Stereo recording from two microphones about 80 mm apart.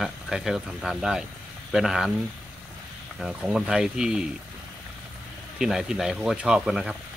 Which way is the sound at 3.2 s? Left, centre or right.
Centre.